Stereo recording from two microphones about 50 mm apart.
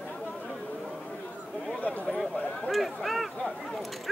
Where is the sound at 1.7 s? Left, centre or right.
Left.